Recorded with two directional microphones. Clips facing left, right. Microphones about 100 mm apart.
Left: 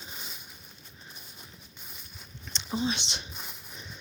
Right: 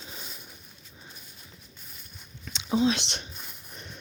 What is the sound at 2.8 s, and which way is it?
Speech, 90° right.